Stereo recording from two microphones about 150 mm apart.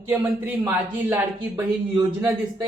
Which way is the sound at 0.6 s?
15° right (ahead or behind).